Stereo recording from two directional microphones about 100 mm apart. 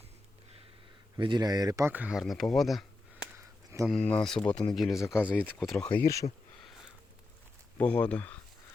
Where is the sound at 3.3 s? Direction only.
30° right (ahead or behind).